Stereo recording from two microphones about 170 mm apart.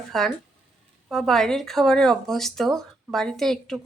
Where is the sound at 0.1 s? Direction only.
Centre (ahead or behind).